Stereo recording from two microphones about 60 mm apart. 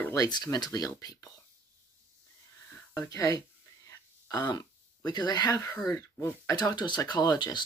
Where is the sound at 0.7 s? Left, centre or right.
Left.